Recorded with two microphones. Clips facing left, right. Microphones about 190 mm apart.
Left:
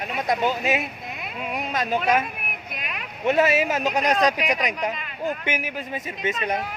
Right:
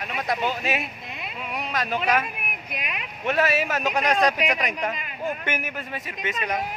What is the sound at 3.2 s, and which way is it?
Speech, 20° left (ahead or behind).